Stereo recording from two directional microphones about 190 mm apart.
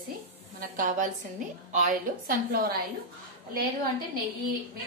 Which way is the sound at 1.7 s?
45° right (ahead or behind).